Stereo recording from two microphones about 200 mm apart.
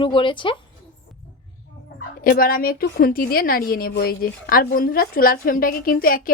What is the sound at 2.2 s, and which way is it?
A woman's voice, 45° left (ahead or behind).